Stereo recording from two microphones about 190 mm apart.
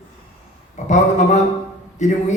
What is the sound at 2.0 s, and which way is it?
Speech, 40° left (ahead or behind).